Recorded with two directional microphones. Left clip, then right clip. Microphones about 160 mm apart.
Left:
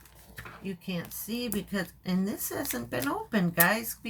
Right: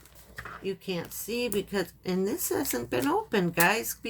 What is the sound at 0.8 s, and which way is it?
Speech, 45° right (ahead or behind).